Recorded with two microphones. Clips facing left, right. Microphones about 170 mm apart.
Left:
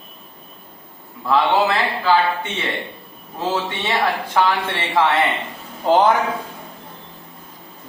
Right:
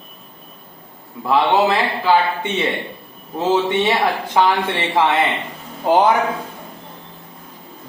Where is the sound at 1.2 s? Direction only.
15° right (ahead or behind).